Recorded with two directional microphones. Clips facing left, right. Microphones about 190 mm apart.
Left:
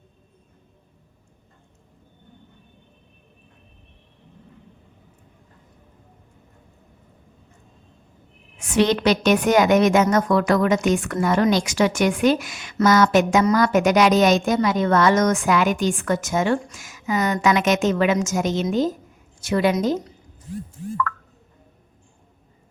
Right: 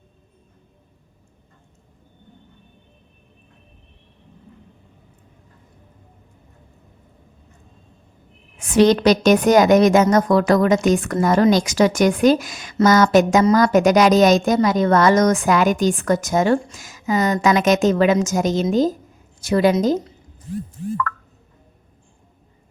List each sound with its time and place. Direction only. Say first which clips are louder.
8.5 s a woman's voice: right 5 dB; 40° right (ahead or behind)